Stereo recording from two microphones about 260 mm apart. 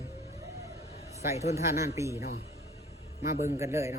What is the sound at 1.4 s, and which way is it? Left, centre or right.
Speech, left.